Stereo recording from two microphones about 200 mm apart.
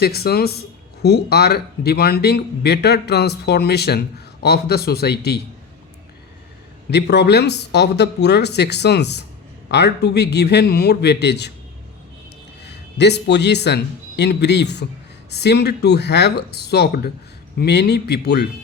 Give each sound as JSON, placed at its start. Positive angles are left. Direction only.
{"t": 0.0, "sound": "speech", "side_deg": 50}
{"t": 6.9, "sound": "speech", "side_deg": 55}
{"t": 12.6, "sound": "a man's voice", "side_deg": 55}